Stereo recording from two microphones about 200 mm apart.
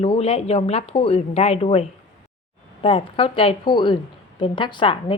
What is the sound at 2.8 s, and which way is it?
A woman's voice, 30° left (ahead or behind).